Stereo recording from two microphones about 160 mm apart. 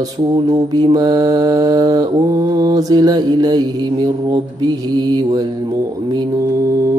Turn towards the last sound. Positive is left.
turn(degrees=-20)  # may be behind; listen again after turning